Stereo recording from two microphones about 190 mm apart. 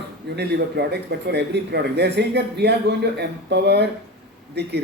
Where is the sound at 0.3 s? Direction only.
60° right (ahead or behind).